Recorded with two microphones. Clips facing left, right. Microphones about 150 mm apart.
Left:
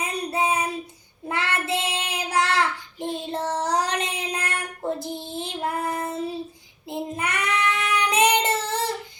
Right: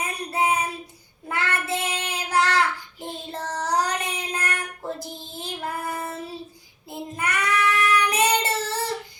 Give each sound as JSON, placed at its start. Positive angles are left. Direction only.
{"t": 0.0, "sound": "child singing", "side_deg": 20}